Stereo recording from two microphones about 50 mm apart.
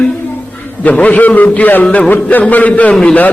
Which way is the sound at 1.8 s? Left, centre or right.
Left.